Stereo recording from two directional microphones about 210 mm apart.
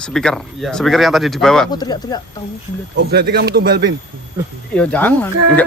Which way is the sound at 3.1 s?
50° right (ahead or behind).